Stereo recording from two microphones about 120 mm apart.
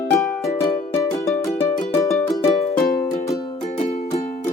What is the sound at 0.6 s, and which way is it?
Music, 25° left (ahead or behind).